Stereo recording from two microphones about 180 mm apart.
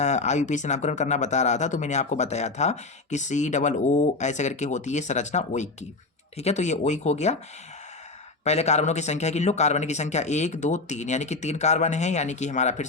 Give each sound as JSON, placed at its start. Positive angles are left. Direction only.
{"t": 0.0, "sound": "speech", "side_deg": 40}
{"t": 8.4, "sound": "speech", "side_deg": 40}